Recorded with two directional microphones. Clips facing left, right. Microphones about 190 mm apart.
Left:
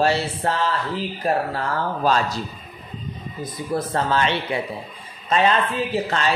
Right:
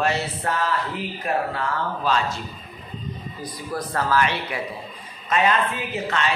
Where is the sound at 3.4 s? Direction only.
25° left (ahead or behind).